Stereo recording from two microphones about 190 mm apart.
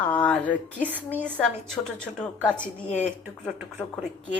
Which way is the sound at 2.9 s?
35° left (ahead or behind).